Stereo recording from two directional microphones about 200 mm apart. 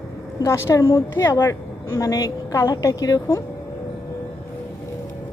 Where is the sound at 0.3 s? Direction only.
15° left (ahead or behind).